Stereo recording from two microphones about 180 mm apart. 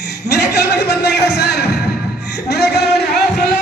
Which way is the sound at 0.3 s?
65° left (ahead or behind).